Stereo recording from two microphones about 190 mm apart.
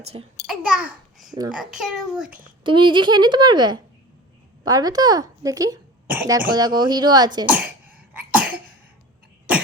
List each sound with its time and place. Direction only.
0.0 s a child's voice: 30° right (ahead or behind)
0.4 s a child's voice: 5° right (ahead or behind)
2.6 s a woman's voice: 25° right (ahead or behind)
7.4 s throat clearing: 5° right (ahead or behind)
8.3 s cough: 5° right (ahead or behind)